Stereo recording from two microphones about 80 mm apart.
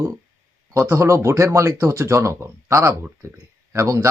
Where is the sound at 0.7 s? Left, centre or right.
Right.